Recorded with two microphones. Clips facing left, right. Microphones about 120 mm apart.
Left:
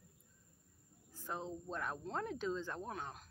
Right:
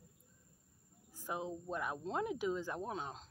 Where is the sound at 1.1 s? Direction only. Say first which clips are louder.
Right 2 dB; 10° right (ahead or behind).